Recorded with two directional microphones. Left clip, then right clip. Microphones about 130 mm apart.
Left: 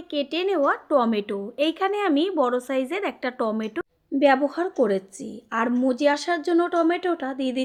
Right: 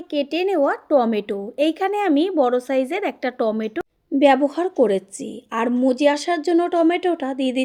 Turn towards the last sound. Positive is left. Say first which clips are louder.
# right 4 dB
turn(degrees=-40)  # may be behind; listen again after turning